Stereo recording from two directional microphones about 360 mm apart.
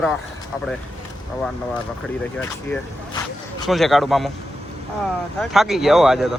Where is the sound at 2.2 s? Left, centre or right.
Centre.